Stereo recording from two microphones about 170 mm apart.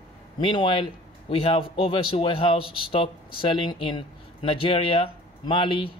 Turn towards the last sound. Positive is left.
turn(degrees=30)  # may be behind; listen again after turning